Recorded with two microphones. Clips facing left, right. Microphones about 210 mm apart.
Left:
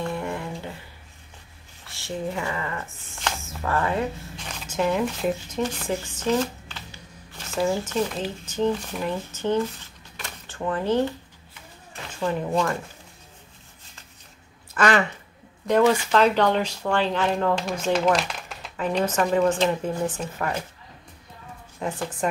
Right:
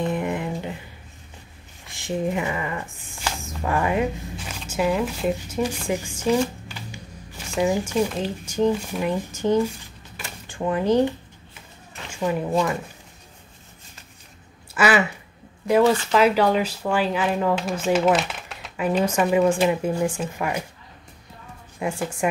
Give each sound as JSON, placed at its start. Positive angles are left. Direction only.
{"t": 0.0, "sound": "a sound", "side_deg": -15}
{"t": 1.9, "sound": "speech", "side_deg": -15}
{"t": 10.1, "sound": "typewriter", "side_deg": -10}
{"t": 12.1, "sound": "speech", "side_deg": -10}
{"t": 14.7, "sound": "speech", "side_deg": -10}
{"t": 21.7, "sound": "speech", "side_deg": -10}